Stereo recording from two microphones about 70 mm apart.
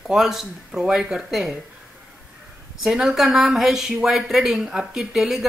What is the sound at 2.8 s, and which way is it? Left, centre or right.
Speech, centre.